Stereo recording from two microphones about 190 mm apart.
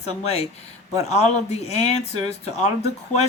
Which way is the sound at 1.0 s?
35° left (ahead or behind).